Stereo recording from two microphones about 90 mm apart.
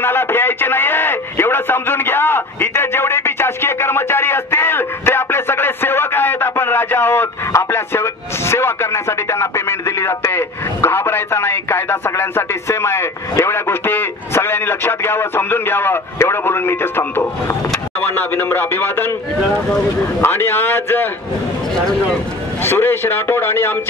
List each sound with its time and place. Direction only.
0.0 s radio: 25° left (ahead or behind)
18.0 s a man's voice: 25° left (ahead or behind)
20.2 s a man's voice: 25° left (ahead or behind)
22.6 s a man's voice: 25° left (ahead or behind)